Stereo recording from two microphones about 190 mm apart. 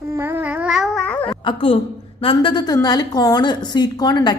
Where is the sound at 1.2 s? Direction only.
25° left (ahead or behind).